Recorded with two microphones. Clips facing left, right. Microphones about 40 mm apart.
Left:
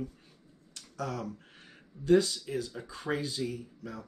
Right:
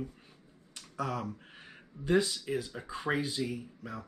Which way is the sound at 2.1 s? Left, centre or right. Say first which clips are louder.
Left 3 dB; centre.